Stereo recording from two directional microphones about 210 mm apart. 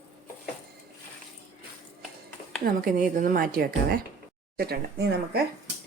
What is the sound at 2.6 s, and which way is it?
Speech, 40° right (ahead or behind).